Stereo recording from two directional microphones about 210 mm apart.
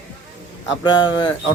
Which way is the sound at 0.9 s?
20° left (ahead or behind).